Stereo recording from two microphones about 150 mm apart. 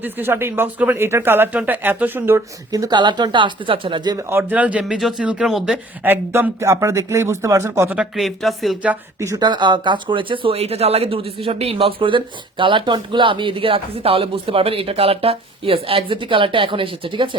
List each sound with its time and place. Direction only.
0.0 s speech: 15° right (ahead or behind)
7.9 s speech: centre (ahead or behind)
8.9 s speech: 20° right (ahead or behind)